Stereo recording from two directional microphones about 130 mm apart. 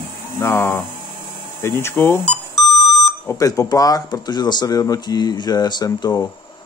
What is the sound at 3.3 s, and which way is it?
Speech, 25° left (ahead or behind).